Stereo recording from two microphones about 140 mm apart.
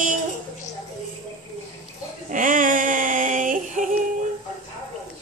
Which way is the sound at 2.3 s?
70° right (ahead or behind).